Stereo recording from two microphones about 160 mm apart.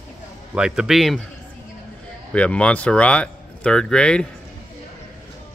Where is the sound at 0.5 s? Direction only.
5° right (ahead or behind).